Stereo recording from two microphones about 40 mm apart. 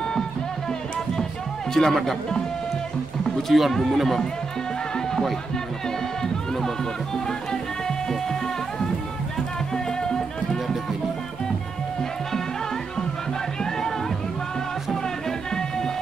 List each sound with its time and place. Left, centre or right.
1.7 s speech: centre
3.4 s speech: centre
10.0 s music: centre